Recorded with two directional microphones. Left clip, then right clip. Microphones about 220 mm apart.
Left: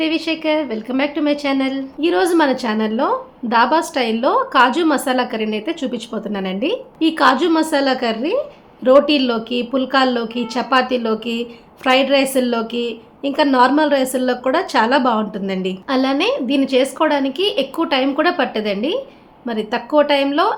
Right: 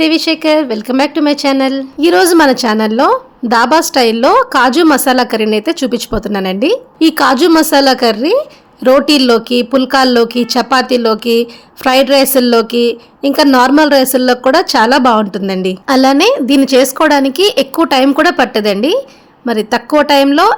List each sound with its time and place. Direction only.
0.0 s speech: 50° right (ahead or behind)